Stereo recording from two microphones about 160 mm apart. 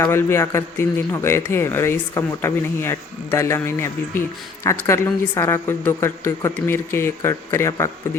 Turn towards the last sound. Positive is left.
turn(degrees=15)  # may be behind; listen again after turning